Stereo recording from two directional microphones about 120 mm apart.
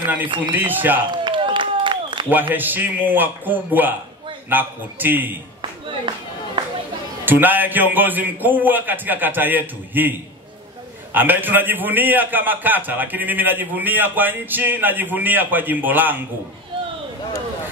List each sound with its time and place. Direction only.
0.0 s a man's voice: 15° right (ahead or behind)
1.1 s applause: 40° right (ahead or behind)
2.2 s a man's voice: 15° right (ahead or behind)
5.6 s a sound: 40° right (ahead or behind)
7.2 s a man's voice: 15° right (ahead or behind)
11.1 s a man's voice: 15° right (ahead or behind)